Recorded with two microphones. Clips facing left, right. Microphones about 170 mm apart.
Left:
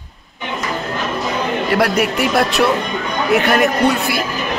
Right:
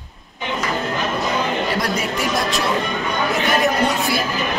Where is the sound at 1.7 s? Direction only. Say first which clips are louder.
Left 6 dB; 65° left (ahead or behind).